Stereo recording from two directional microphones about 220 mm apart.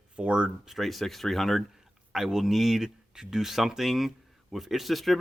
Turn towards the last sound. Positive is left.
turn(degrees=0)  # may be behind; listen again after turning